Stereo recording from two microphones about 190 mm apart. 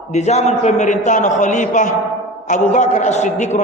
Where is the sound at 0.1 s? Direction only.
35° left (ahead or behind).